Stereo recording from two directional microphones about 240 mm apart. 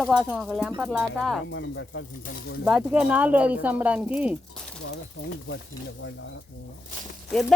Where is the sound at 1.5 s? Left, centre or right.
Left.